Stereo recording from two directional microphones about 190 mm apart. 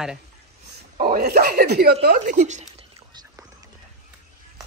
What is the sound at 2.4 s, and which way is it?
Speech, 40° right (ahead or behind).